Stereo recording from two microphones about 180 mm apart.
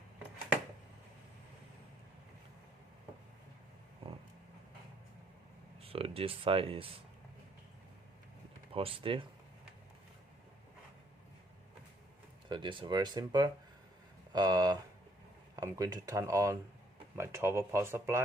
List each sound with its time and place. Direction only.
5.8 s speech: 30° right (ahead or behind)
8.7 s speech: 30° right (ahead or behind)
12.5 s speech: 25° right (ahead or behind)